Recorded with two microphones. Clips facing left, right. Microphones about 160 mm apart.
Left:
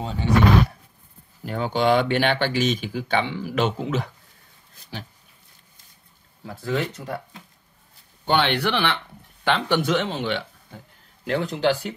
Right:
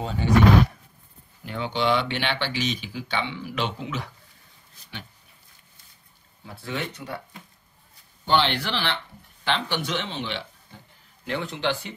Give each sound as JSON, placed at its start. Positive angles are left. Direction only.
{"t": 0.0, "sound": "a sound", "side_deg": 25}
{"t": 1.4, "sound": "speech", "side_deg": 45}
{"t": 6.4, "sound": "speech", "side_deg": 40}
{"t": 8.3, "sound": "speech", "side_deg": 55}